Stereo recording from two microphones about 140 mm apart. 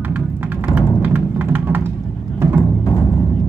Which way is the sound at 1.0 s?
15° right (ahead or behind).